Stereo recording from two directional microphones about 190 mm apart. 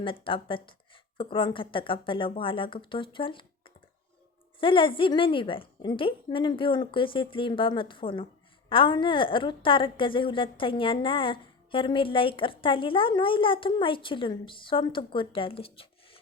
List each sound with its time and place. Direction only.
0.0 s a woman's voice: 25° left (ahead or behind)